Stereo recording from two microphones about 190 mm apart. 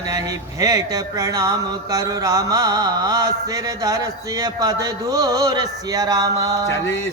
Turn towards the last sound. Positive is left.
turn(degrees=-20)  # may be behind; listen again after turning